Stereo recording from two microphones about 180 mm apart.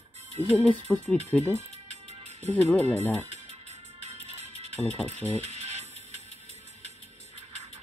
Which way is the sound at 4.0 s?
35° right (ahead or behind).